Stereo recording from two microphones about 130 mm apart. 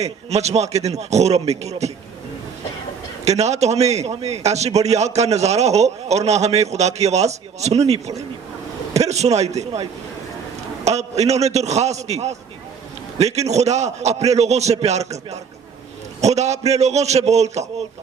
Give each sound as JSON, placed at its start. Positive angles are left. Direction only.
{"t": 0.0, "sound": "a man's voice", "side_deg": -55}
{"t": 3.2, "sound": "a man's voice", "side_deg": -60}
{"t": 10.8, "sound": "a man's voice", "side_deg": -55}